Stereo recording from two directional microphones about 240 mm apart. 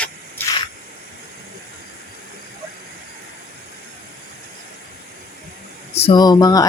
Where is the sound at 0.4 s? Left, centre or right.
Centre.